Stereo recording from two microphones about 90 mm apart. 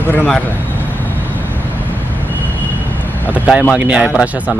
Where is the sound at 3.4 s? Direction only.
10° right (ahead or behind).